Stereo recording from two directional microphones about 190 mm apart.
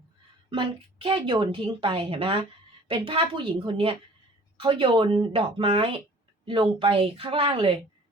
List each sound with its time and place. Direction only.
0.5 s a woman's voice: 25° right (ahead or behind)